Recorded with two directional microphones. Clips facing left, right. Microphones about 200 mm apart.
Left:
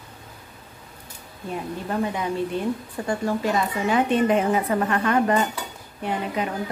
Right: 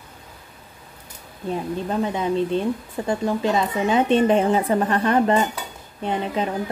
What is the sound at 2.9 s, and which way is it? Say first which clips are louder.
A woman's voice: right 3 dB; 20° right (ahead or behind).